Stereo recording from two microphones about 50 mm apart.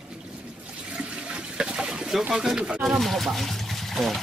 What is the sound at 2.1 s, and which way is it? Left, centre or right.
Speech, centre.